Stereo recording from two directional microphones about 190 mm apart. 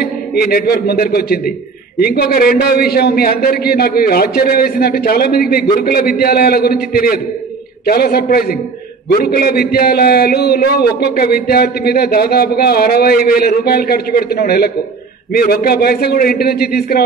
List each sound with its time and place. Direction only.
0.0 s a man's voice: 55° left (ahead or behind)